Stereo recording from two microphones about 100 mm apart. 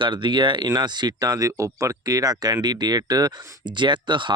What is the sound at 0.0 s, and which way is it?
Speech, 55° right (ahead or behind).